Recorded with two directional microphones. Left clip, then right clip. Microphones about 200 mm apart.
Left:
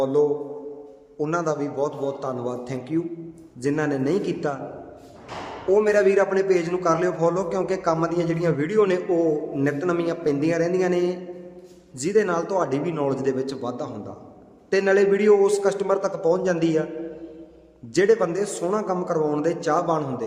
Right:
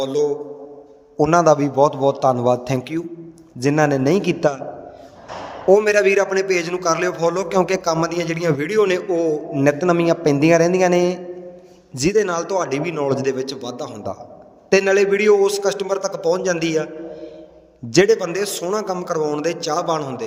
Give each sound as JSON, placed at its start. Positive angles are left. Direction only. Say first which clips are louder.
{"t": 0.0, "sound": "a man's voice", "louder": "right 1 dB", "side_deg": -45}
{"t": 5.6, "sound": "a man's voice", "louder": "right 5 dB", "side_deg": -40}
{"t": 17.9, "sound": "a man's voice", "louder": "right 4 dB", "side_deg": -40}